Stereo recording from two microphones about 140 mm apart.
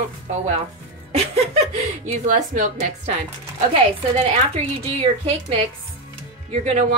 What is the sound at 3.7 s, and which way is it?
Speech, 45° right (ahead or behind).